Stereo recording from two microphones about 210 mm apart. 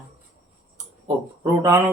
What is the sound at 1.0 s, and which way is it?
Speech, 25° right (ahead or behind).